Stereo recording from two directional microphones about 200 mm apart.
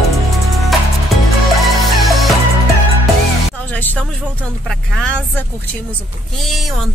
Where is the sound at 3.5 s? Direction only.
10° left (ahead or behind).